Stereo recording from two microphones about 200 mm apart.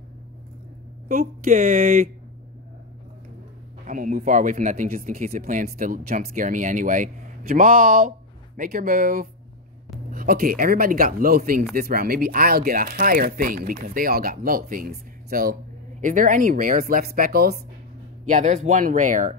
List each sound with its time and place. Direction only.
1.0 s speech: 45° right (ahead or behind)
3.8 s speech: 40° right (ahead or behind)